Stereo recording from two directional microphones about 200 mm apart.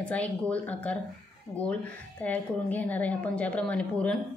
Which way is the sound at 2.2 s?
10° left (ahead or behind).